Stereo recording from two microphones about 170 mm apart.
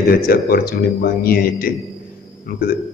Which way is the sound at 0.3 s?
60° left (ahead or behind).